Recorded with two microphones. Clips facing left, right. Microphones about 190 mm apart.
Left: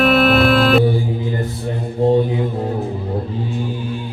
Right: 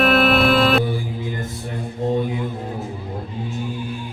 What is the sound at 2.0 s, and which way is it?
Mantra, 30° left (ahead or behind).